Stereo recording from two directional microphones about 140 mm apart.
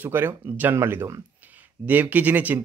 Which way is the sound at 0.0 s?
15° right (ahead or behind).